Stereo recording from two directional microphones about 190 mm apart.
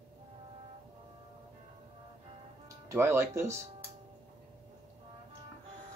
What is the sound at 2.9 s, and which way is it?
Speech, 15° right (ahead or behind).